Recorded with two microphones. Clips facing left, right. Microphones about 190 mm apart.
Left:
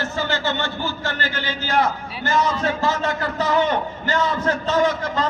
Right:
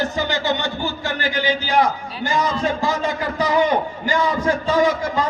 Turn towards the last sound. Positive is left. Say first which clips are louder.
# right 2 dB
turn(degrees=-10)  # may be behind; listen again after turning